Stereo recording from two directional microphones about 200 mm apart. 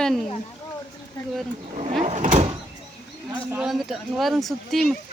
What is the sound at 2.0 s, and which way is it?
Speech, 35° right (ahead or behind).